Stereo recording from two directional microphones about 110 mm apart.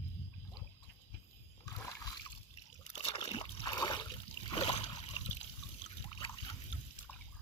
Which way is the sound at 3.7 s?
35° left (ahead or behind).